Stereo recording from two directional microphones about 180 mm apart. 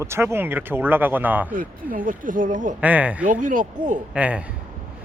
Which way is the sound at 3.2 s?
45° right (ahead or behind).